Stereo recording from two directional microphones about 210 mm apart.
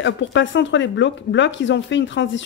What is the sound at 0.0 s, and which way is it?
Speech, 60° left (ahead or behind).